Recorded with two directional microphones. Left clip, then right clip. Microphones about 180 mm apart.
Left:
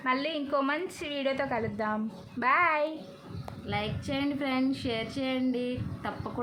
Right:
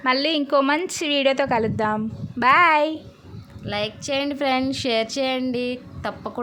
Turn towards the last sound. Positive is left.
turn(degrees=-60)  # may be behind; listen again after turning